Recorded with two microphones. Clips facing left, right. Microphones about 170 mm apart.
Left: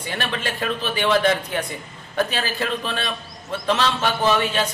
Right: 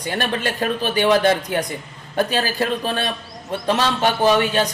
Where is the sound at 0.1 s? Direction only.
45° right (ahead or behind).